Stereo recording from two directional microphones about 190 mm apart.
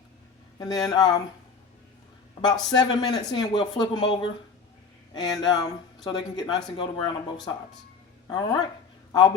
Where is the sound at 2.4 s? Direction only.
20° left (ahead or behind).